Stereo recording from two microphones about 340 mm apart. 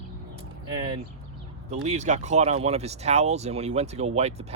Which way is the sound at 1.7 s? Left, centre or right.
Centre.